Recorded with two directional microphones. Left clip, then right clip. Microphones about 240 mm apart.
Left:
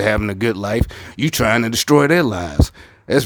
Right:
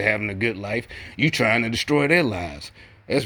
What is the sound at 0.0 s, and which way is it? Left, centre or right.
Speech, left.